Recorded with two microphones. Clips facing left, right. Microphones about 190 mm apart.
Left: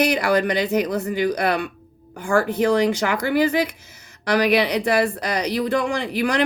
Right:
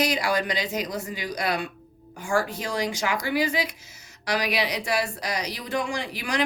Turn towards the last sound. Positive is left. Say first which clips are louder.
# left 7 dB
turn(degrees=60)  # may be behind; listen again after turning